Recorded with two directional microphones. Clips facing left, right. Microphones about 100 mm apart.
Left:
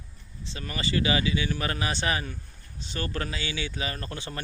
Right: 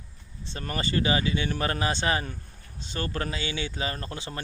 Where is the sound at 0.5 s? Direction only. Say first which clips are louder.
Right 1 dB; 45° right (ahead or behind).